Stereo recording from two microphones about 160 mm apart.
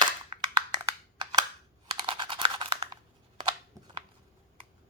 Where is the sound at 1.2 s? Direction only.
30° right (ahead or behind).